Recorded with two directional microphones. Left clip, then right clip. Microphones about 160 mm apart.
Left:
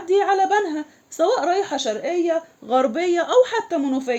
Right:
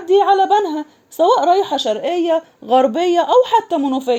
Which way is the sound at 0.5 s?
30° right (ahead or behind).